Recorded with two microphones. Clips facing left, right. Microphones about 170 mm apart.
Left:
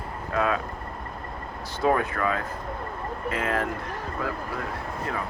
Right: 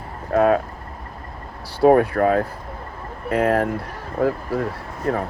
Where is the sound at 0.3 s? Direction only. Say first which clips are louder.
Right 9 dB; 50° right (ahead or behind).